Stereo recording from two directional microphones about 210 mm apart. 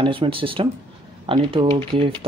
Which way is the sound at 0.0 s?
25° right (ahead or behind).